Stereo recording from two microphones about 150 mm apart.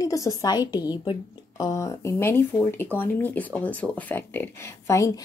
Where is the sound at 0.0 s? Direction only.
25° left (ahead or behind).